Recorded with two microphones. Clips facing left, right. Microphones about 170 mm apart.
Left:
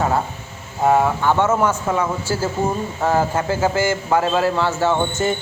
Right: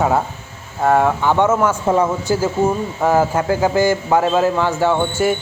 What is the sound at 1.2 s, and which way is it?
A man's voice, 15° right (ahead or behind).